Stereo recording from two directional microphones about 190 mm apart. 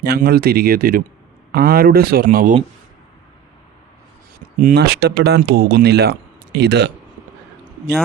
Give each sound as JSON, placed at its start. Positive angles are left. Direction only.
{"t": 0.0, "sound": "speech", "side_deg": -55}
{"t": 4.5, "sound": "speech", "side_deg": -50}